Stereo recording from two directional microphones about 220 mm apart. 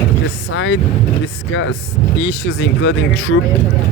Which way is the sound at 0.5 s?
60° left (ahead or behind).